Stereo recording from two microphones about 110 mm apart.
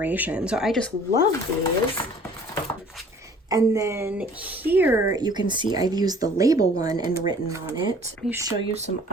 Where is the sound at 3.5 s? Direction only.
30° right (ahead or behind).